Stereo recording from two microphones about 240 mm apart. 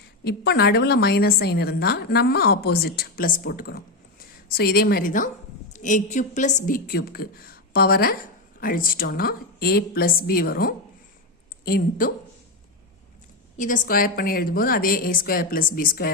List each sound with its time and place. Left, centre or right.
0.3 s a woman's voice: left
13.6 s a woman's voice: left